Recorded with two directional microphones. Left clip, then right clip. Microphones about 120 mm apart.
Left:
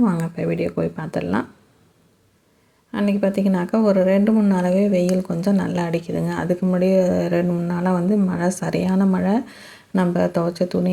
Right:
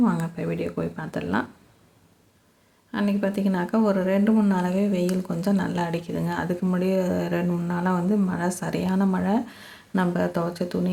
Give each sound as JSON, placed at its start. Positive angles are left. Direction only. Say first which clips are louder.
{"t": 0.0, "sound": "speech", "louder": "left 4 dB", "side_deg": 30}
{"t": 2.9, "sound": "speech", "louder": "left 5 dB", "side_deg": 30}